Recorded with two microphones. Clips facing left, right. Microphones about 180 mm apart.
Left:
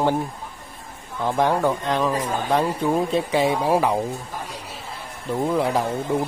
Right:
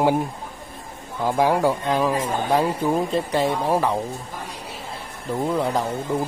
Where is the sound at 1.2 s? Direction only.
5° right (ahead or behind).